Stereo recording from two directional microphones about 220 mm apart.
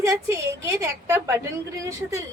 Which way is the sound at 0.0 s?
15° right (ahead or behind).